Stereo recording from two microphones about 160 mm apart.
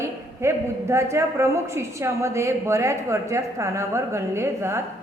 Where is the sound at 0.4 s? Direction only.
15° right (ahead or behind).